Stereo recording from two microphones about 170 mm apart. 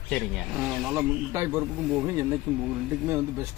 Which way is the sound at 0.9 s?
15° right (ahead or behind).